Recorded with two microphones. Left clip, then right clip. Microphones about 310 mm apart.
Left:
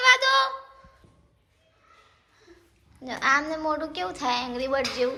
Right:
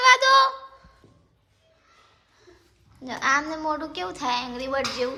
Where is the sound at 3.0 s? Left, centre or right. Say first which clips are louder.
Even; centre.